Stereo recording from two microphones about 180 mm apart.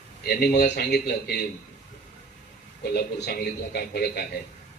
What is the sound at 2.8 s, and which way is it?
A man's voice, 65° left (ahead or behind).